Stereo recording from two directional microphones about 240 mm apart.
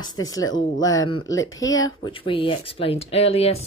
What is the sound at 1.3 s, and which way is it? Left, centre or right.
Speech, left.